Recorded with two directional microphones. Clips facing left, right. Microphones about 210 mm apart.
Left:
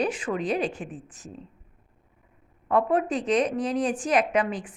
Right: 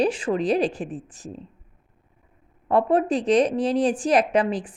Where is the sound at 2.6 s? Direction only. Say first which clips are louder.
Right 3 dB; 30° right (ahead or behind).